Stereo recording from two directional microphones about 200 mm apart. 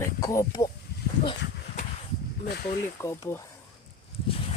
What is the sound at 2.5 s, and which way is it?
Speech, 50° left (ahead or behind).